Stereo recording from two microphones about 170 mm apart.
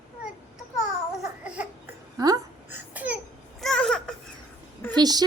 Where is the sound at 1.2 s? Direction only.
5° right (ahead or behind).